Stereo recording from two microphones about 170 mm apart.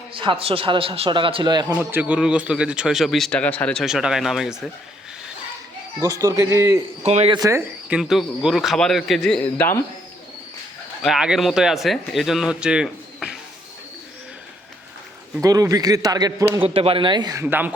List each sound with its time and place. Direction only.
0.1 s a man's voice: 30° right (ahead or behind)
1.7 s speech: 10° right (ahead or behind)
6.0 s a man's voice: 15° right (ahead or behind)
7.0 s a man's voice: 40° right (ahead or behind)
7.3 s a man's voice: 20° right (ahead or behind)
7.9 s speech: 5° right (ahead or behind); by 9.8 s 15° left (ahead or behind)
11.0 s speech: 5° right (ahead or behind)
15.4 s a man's voice: 20° right (ahead or behind)
16.6 s a man's voice: 35° right (ahead or behind)
17.4 s a man's voice: 10° right (ahead or behind)